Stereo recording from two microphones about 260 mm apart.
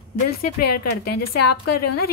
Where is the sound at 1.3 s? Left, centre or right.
Left.